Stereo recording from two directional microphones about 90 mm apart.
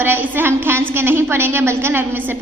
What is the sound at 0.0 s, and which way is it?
A woman's voice, 25° right (ahead or behind).